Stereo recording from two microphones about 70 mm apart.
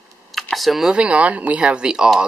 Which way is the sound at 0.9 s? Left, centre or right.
Centre.